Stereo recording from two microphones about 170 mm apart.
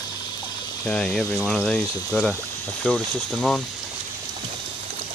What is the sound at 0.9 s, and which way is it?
Speech, 5° left (ahead or behind).